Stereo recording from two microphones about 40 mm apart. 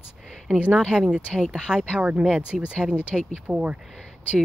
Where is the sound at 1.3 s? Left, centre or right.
Centre.